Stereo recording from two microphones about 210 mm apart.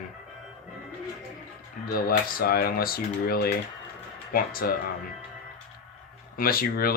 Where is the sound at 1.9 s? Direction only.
45° left (ahead or behind).